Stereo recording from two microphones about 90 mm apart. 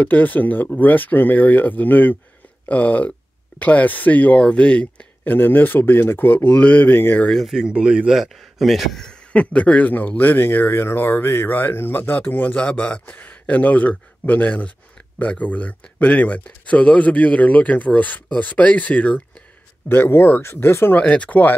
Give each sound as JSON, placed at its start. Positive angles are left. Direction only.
{"t": 0.0, "sound": "speech", "side_deg": 20}
{"t": 7.2, "sound": "speech", "side_deg": 0}
{"t": 7.7, "sound": "a man's voice", "side_deg": -15}
{"t": 21.0, "sound": "a man's voice", "side_deg": 10}